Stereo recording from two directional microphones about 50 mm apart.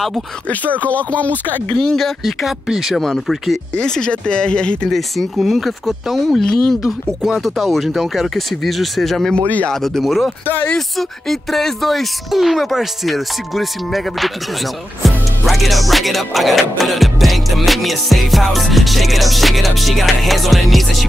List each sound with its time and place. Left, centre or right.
0.7 s speech: left
1.8 s music: centre
3.7 s speech: centre
4.8 s music: centre
10.4 s speech: left
11.0 s music: centre